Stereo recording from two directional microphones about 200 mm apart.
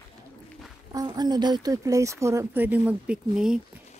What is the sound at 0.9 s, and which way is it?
Speech, 20° right (ahead or behind).